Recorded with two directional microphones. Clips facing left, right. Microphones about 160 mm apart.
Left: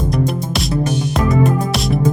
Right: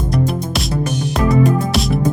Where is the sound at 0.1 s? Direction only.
Centre (ahead or behind).